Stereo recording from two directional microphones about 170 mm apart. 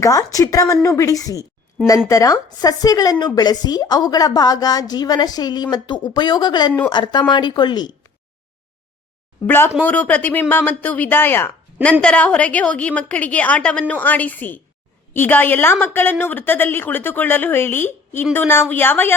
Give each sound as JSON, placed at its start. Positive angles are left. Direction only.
{"t": 0.0, "sound": "a woman's voice", "side_deg": 20}
{"t": 9.5, "sound": "a woman's voice", "side_deg": 10}